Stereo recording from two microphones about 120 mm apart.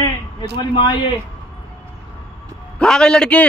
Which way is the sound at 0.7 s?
40° left (ahead or behind).